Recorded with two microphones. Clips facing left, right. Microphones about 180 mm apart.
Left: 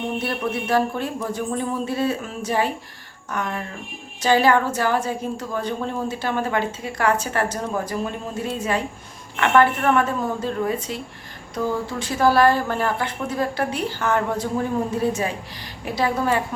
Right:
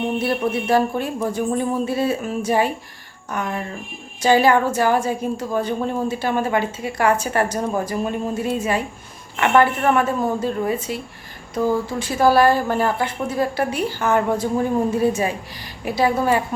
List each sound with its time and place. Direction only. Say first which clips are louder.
0.2 s a woman's voice: right 4 dB; 10° right (ahead or behind)